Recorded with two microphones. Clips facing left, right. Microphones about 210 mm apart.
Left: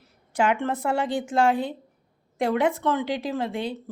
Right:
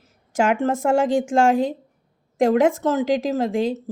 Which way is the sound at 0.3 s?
45° right (ahead or behind).